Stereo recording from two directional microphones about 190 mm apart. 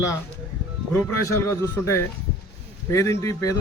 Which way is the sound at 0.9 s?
15° left (ahead or behind).